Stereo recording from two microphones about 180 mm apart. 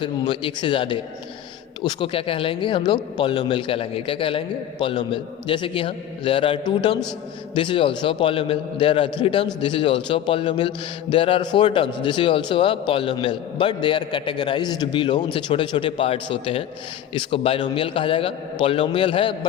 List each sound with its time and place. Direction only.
0.0 s a man's voice: 25° left (ahead or behind)